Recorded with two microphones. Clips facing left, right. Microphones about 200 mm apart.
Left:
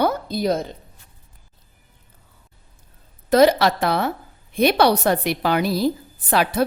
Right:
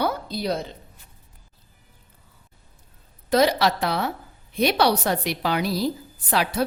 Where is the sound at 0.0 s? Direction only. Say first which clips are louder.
Left 5 dB; 50° left (ahead or behind).